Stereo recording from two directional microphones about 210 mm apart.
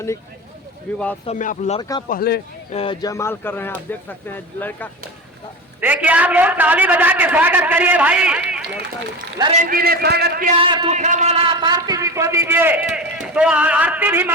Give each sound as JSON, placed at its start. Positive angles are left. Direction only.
{"t": 0.9, "sound": "speech", "side_deg": 5}
{"t": 1.3, "sound": "speech", "side_deg": 35}
{"t": 1.8, "sound": "speech", "side_deg": 20}
{"t": 2.0, "sound": "a man's voice", "side_deg": 45}
{"t": 2.7, "sound": "speech", "side_deg": 25}
{"t": 5.8, "sound": "a man's voice", "side_deg": -5}
{"t": 9.4, "sound": "a man's voice", "side_deg": -30}
{"t": 9.6, "sound": "a man's voice", "side_deg": -45}
{"t": 10.6, "sound": "a man's voice", "side_deg": -25}
{"t": 10.9, "sound": "a man's voice", "side_deg": -35}